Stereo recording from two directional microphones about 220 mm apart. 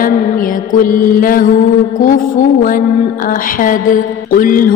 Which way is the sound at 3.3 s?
40° left (ahead or behind).